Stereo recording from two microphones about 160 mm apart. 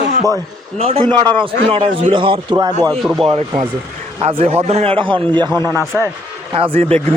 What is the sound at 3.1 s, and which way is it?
A man's voice, 35° right (ahead or behind).